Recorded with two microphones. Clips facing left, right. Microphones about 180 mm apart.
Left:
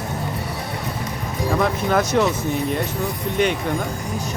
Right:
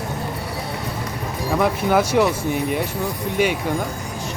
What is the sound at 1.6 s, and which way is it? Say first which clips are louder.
Speech: right 2 dB; 10° right (ahead or behind).